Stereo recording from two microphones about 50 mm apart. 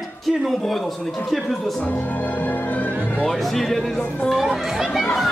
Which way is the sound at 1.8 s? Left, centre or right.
Left.